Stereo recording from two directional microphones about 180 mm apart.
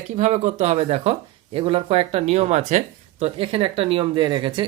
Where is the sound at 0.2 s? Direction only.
40° right (ahead or behind).